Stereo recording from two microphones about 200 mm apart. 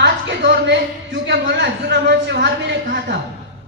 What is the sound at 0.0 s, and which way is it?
A woman's voice, 60° right (ahead or behind).